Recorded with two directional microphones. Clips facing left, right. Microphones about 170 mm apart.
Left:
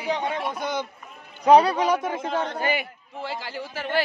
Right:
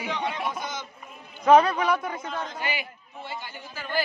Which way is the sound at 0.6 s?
60° left (ahead or behind).